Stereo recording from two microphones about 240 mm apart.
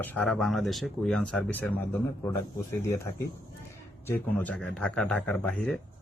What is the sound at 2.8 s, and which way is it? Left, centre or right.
Speech, centre.